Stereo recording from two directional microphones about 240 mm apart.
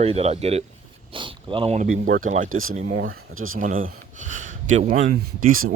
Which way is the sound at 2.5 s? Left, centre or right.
Right.